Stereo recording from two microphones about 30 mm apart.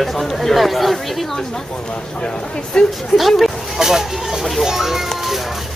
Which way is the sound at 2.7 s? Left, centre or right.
Left.